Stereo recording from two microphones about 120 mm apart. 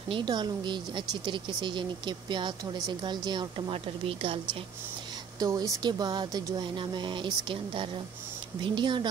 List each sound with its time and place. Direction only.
0.1 s speech: 40° right (ahead or behind)
5.4 s a woman's voice: 30° right (ahead or behind)